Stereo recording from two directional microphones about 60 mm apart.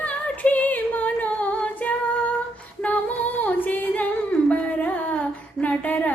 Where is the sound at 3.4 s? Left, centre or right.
Left.